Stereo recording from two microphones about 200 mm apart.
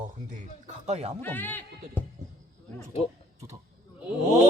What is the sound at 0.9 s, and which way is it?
Speech, 35° right (ahead or behind).